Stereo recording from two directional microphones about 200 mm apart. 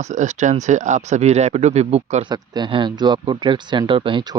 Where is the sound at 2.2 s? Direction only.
20° right (ahead or behind).